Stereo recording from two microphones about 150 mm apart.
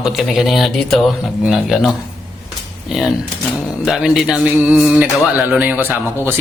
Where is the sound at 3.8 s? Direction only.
5° right (ahead or behind).